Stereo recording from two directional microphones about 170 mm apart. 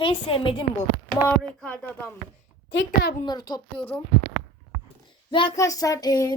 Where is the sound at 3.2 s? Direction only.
25° left (ahead or behind).